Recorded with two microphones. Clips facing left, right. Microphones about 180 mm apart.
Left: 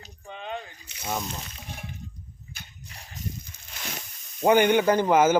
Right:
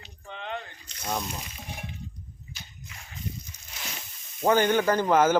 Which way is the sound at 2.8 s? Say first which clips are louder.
Left 1 dB; 35° left (ahead or behind).